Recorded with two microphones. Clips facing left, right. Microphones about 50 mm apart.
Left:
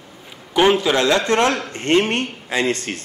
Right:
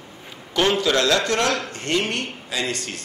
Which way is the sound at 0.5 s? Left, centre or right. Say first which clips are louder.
Left 4 dB; centre.